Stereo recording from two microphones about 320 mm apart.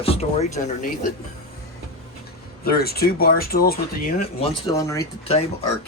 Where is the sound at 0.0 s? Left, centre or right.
Centre.